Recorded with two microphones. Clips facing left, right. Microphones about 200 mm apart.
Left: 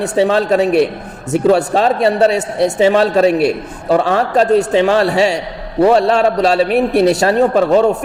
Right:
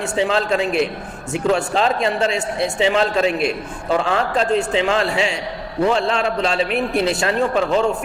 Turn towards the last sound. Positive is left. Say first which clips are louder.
# left 7 dB
turn(degrees=40)  # may be behind; listen again after turning